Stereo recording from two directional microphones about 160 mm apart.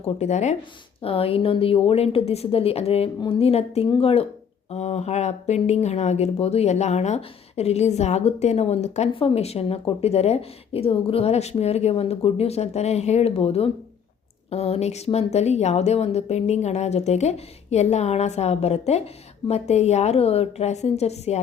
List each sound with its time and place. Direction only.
0.0 s a woman's voice: 45° left (ahead or behind)